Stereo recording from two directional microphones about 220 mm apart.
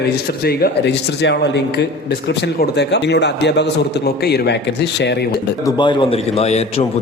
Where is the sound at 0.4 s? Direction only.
50° left (ahead or behind).